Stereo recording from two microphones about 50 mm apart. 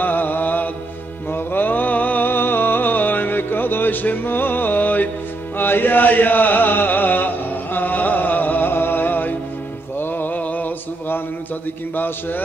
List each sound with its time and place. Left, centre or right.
0.0 s mantra: left
1.3 s a sound: left
5.6 s chant: left
9.9 s music: left
11.9 s a man's voice: left